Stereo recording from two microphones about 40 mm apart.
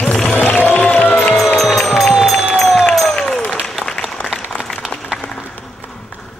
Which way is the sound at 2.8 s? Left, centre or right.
Centre.